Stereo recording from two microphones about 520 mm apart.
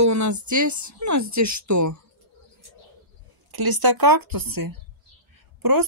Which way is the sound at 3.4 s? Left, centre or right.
Right.